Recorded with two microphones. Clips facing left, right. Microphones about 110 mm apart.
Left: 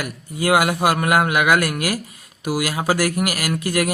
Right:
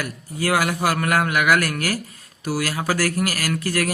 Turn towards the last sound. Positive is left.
turn(degrees=15)  # may be behind; listen again after turning